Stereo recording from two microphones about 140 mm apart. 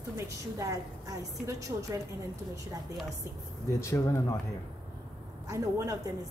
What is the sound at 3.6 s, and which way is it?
Speech, 20° left (ahead or behind).